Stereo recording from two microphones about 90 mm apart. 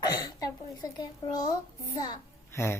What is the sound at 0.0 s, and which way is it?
Hiccup, 45° left (ahead or behind).